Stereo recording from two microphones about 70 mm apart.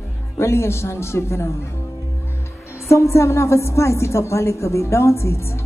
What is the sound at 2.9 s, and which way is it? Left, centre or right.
A woman's voice, left.